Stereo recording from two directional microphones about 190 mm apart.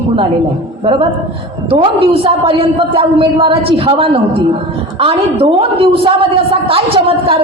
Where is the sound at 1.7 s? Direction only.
30° right (ahead or behind).